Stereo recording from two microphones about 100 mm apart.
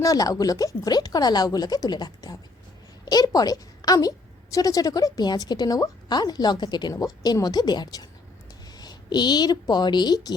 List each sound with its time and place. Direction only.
0.0 s a woman's voice: 35° left (ahead or behind)